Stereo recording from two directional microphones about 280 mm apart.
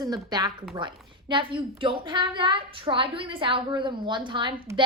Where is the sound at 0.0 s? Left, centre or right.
Centre.